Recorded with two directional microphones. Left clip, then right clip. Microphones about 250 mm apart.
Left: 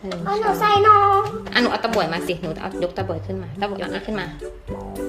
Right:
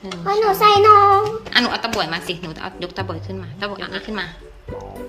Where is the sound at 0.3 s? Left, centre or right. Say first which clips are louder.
Right 4 dB; right.